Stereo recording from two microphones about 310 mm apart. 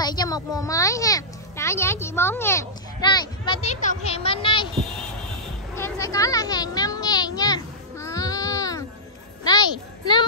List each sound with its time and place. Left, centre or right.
0.0 s a child's voice: centre
5.8 s a sound: centre
9.4 s a child's voice: centre